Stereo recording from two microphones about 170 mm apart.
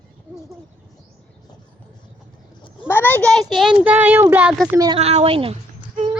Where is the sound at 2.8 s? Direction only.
10° left (ahead or behind); by 4.8 s 5° right (ahead or behind).